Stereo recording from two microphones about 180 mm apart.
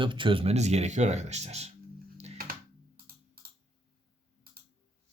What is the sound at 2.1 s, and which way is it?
Music, 35° right (ahead or behind).